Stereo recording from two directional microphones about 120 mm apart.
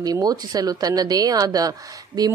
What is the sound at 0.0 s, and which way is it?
Speech, 30° right (ahead or behind).